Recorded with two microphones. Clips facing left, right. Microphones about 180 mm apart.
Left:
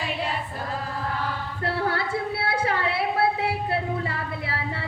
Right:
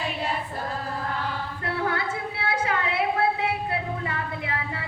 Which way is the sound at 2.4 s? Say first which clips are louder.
Right 1 dB; 30° left (ahead or behind).